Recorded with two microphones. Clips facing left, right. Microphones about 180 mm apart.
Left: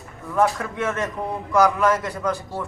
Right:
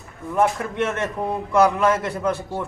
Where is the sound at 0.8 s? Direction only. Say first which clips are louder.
Right 2 dB; 25° right (ahead or behind).